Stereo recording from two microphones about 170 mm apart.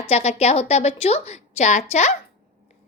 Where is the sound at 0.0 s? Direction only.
40° left (ahead or behind).